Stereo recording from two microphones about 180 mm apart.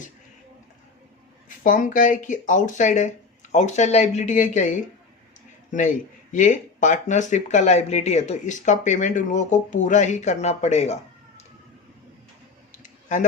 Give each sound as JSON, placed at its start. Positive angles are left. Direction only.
{"t": 1.5, "sound": "speech", "side_deg": 50}
{"t": 12.8, "sound": "clicking", "side_deg": 45}